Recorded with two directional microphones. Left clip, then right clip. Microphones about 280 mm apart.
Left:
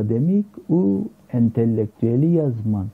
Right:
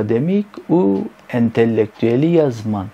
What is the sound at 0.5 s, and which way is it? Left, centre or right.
Speech, right.